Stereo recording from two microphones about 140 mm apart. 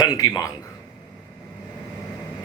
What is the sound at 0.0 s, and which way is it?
Speech, 25° left (ahead or behind).